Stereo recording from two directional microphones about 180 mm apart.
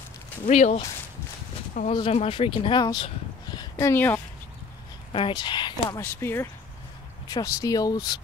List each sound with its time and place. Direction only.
0.5 s speech: 40° left (ahead or behind)
2.0 s speech: 30° left (ahead or behind)
3.7 s speech: 15° left (ahead or behind)
5.1 s speech: 25° left (ahead or behind)
6.0 s speech: 10° left (ahead or behind)